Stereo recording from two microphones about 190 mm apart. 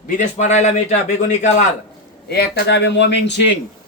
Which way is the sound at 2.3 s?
60° left (ahead or behind).